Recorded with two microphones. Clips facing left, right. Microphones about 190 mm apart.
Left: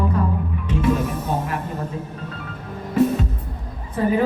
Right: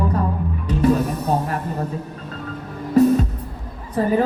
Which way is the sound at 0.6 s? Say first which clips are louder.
Right 3 dB; 35° right (ahead or behind).